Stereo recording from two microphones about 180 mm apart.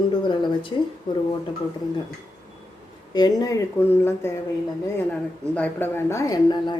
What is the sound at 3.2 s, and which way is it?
Speech, 20° left (ahead or behind).